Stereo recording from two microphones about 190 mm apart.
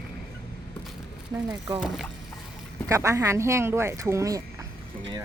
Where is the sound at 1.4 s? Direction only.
15° right (ahead or behind).